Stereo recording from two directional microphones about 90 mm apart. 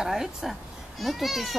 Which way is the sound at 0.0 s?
5° right (ahead or behind).